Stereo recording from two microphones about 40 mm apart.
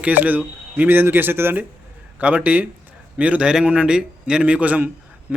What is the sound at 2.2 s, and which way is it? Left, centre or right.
A man's voice, right.